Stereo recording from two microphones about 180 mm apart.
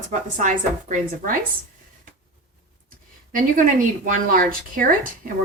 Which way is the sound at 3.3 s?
50° right (ahead or behind).